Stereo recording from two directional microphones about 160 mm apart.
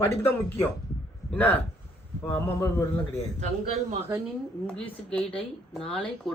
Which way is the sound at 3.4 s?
45° right (ahead or behind).